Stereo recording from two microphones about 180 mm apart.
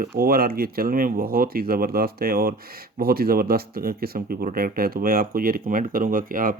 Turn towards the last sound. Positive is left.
turn(degrees=-50)  # may be behind; listen again after turning